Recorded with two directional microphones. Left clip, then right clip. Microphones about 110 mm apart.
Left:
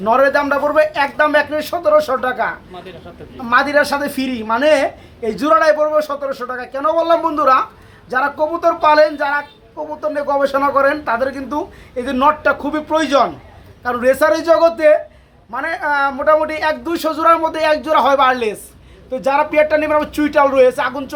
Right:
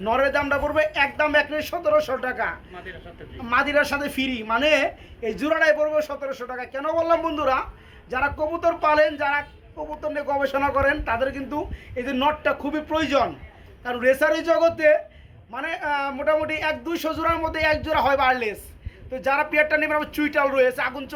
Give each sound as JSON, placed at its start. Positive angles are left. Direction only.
{"t": 0.0, "sound": "speech", "side_deg": -5}
{"t": 19.1, "sound": "speech", "side_deg": 30}